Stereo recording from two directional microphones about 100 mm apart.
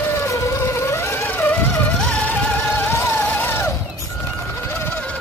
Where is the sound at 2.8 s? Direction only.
20° left (ahead or behind).